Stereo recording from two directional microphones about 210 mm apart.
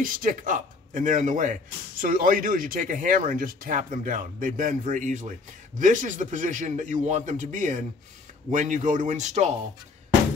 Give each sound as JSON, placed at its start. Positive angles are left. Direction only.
{"t": 0.0, "sound": "a man's voice", "side_deg": -40}